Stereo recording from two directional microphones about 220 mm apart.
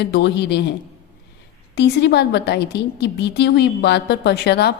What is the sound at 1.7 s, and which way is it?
A woman's voice, 50° left (ahead or behind).